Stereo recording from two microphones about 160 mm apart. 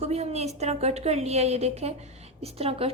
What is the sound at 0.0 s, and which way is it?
A woman's voice, 40° right (ahead or behind).